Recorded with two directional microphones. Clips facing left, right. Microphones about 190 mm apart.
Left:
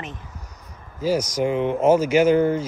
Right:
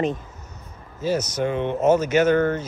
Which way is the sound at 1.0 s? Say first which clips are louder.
Left 2 dB; 10° left (ahead or behind).